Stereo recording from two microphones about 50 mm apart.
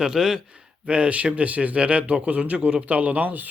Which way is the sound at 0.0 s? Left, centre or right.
Centre.